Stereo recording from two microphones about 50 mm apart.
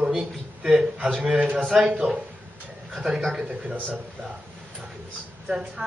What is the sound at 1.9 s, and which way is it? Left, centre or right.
Speech, right.